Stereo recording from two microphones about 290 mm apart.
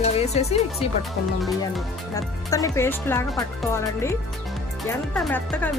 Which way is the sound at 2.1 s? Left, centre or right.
Centre.